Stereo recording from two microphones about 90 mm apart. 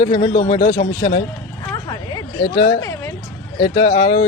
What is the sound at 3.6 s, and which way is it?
Speech, 90° left.